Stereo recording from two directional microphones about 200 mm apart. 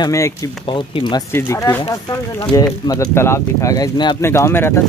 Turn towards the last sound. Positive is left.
turn(degrees=10)  # may be behind; listen again after turning